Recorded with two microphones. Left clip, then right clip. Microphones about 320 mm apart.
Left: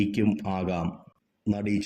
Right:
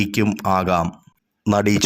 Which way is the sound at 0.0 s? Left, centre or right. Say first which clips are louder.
Right 6 dB; right.